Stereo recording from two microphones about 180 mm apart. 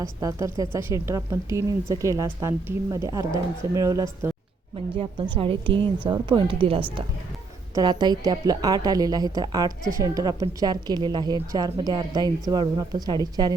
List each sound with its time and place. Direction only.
0.0 s a woman's voice: 20° right (ahead or behind)